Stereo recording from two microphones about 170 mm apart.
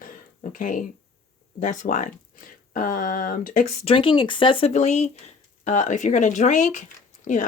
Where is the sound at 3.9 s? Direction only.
30° left (ahead or behind).